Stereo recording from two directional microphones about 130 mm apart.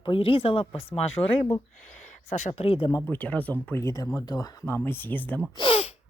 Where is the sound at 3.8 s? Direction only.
25° left (ahead or behind).